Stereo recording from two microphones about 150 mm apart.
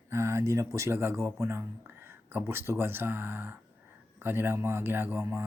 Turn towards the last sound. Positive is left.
turn(degrees=-15)  # may be behind; listen again after turning